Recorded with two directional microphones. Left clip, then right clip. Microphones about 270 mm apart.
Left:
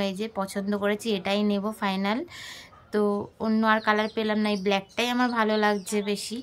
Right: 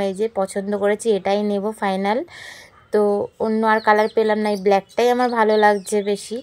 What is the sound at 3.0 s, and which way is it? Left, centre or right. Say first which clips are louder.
Speech: right 8 dB; centre.